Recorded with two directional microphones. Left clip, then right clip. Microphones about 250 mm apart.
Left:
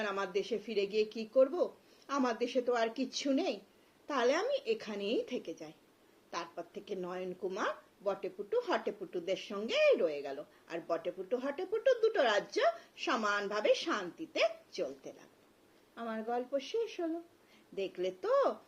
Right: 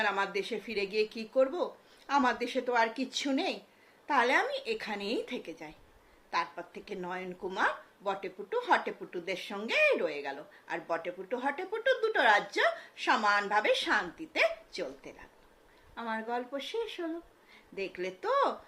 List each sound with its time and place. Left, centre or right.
0.0 s speech: centre
16.0 s speech: centre